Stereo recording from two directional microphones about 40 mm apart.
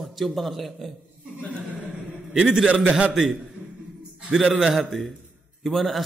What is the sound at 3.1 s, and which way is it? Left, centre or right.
Speech, centre.